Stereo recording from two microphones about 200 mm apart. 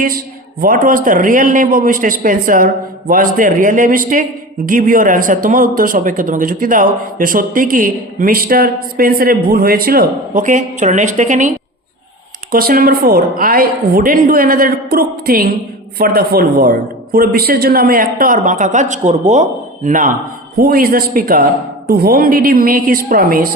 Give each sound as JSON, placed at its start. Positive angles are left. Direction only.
{"t": 0.6, "sound": "a man's voice", "side_deg": -45}